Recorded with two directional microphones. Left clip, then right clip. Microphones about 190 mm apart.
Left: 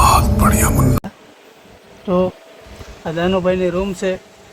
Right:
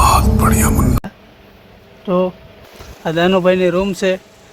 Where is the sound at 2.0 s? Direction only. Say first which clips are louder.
Right 1 dB; 5° left (ahead or behind).